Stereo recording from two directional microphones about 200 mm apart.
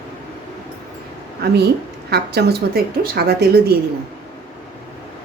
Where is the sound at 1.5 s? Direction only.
55° right (ahead or behind).